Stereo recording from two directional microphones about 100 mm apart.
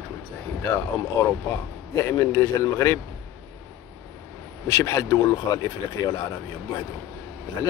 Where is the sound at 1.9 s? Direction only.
25° left (ahead or behind).